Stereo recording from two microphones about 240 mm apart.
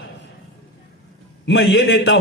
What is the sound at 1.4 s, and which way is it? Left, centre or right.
Speech, left.